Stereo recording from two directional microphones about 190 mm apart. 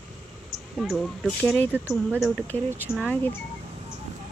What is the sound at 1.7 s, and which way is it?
Speech, 10° right (ahead or behind).